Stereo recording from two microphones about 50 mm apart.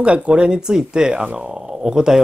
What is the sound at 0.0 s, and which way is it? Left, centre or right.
Speech, right.